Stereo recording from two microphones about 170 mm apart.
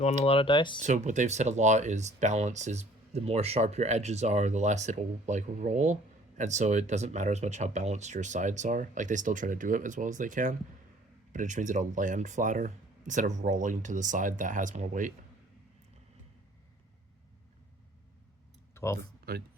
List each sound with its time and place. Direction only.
0.0 s speech: 35° left (ahead or behind)
0.8 s speech: 45° right (ahead or behind)
18.7 s a sound: 15° left (ahead or behind)
19.3 s speech: 60° right (ahead or behind)